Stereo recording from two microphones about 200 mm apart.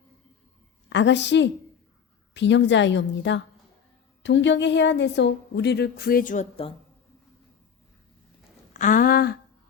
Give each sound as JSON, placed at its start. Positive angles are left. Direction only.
{"t": 0.9, "sound": "a woman's voice", "side_deg": 65}
{"t": 8.7, "sound": "speech", "side_deg": 40}